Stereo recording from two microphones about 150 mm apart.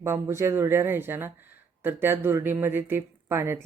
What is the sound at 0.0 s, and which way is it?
Speech, 20° right (ahead or behind).